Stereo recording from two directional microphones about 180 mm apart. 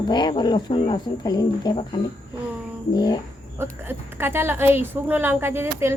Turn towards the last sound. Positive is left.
turn(degrees=-15)  # may be behind; listen again after turning